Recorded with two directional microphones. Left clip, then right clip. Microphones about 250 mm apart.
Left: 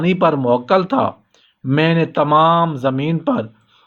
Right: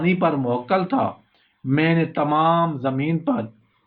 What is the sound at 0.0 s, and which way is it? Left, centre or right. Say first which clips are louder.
Speech: left 5 dB; left.